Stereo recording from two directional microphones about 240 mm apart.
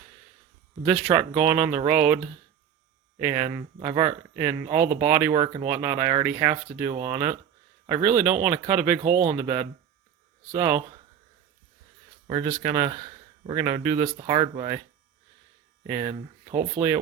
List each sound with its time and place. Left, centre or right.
0.9 s speech: centre
12.6 s speech: centre
15.9 s speech: centre